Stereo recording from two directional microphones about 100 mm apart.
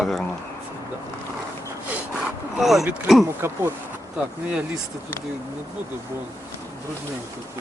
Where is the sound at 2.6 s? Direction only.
Centre (ahead or behind).